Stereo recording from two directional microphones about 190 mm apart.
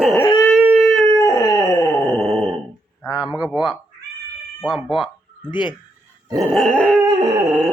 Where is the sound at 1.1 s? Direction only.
15° left (ahead or behind).